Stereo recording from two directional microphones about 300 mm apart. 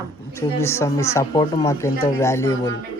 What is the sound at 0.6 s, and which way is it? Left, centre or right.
Speech, centre.